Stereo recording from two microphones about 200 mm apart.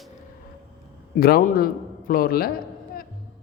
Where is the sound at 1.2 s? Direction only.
50° left (ahead or behind).